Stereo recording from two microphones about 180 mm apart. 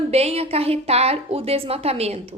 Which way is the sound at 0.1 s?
35° right (ahead or behind).